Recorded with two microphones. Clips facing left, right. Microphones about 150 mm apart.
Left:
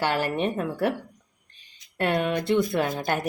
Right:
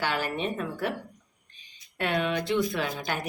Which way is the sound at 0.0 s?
60° left (ahead or behind).